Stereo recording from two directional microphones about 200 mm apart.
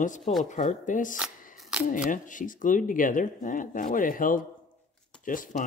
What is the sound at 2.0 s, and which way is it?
Speech, 40° left (ahead or behind).